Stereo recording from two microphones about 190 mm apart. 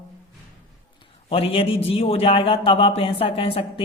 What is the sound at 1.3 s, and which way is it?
A man's voice, 30° left (ahead or behind).